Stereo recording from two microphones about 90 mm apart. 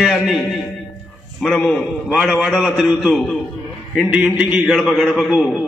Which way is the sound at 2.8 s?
5° right (ahead or behind).